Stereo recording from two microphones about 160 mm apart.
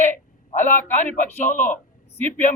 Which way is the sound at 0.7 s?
10° left (ahead or behind).